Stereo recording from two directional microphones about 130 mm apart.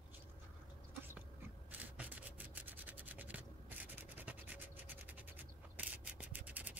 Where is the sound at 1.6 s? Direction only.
10° right (ahead or behind).